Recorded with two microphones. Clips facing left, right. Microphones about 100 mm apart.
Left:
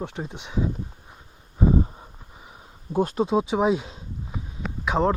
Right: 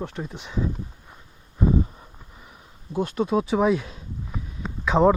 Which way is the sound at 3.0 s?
40° left (ahead or behind).